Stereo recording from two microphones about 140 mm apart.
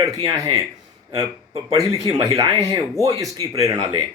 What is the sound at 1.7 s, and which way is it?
A man's voice, 25° right (ahead or behind).